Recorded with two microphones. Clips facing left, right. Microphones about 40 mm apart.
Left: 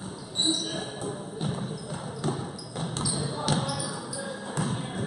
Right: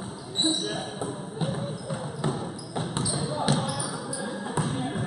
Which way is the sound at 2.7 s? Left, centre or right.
Centre.